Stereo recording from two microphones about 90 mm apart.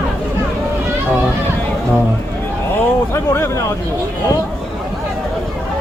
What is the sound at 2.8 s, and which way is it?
Speech, 30° left (ahead or behind).